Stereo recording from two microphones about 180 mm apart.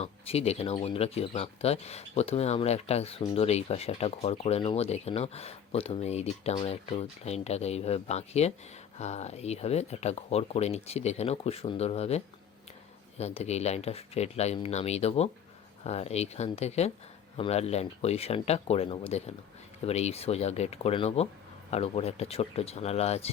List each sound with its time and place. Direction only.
0.0 s speech: 35° left (ahead or behind)